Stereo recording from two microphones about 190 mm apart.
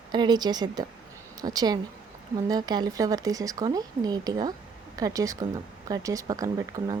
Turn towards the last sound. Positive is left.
turn(degrees=-20)  # may be behind; listen again after turning